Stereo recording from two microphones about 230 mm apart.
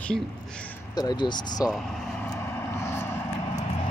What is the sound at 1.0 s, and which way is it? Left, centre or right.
Speech, centre.